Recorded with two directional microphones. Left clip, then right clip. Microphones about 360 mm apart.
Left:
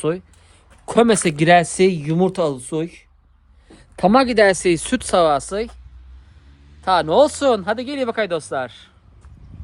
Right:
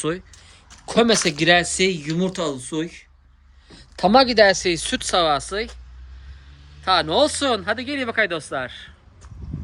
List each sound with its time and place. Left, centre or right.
0.0 s speech: centre
6.8 s speech: centre